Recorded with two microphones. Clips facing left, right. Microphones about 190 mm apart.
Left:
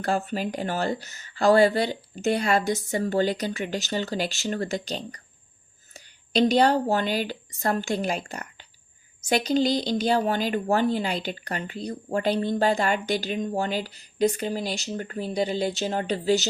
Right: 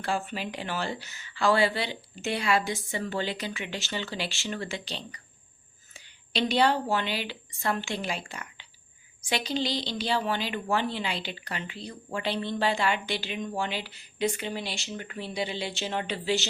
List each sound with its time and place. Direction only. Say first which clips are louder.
0.0 s a woman's voice: left 5 dB; 45° left (ahead or behind)